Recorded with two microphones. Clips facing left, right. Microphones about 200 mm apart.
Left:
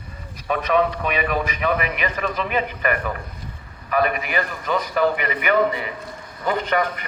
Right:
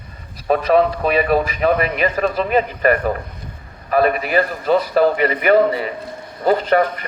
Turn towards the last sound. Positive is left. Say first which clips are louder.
# right 6 dB
turn(degrees=-35)  # may be behind; listen again after turning